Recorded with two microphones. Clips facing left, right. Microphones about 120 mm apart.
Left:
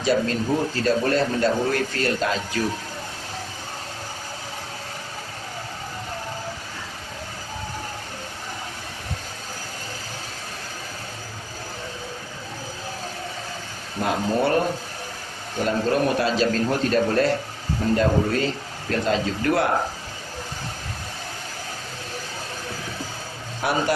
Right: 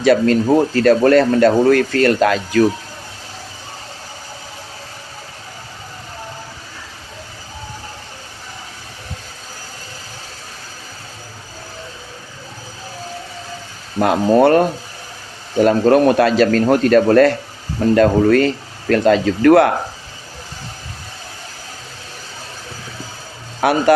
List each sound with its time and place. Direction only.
0.0 s speech: 70° right (ahead or behind)
14.0 s speech: 70° right (ahead or behind)
15.6 s speech: 65° right (ahead or behind)
23.6 s speech: 70° right (ahead or behind)